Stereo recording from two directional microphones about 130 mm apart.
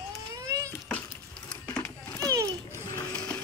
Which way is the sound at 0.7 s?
10° left (ahead or behind).